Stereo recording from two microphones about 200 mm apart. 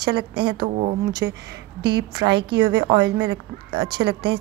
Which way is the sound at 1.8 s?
20° right (ahead or behind).